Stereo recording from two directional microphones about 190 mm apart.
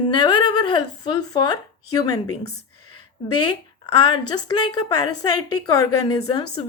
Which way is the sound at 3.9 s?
25° left (ahead or behind).